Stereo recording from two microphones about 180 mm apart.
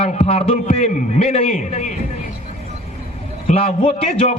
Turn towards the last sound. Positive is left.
turn(degrees=30)  # may be behind; listen again after turning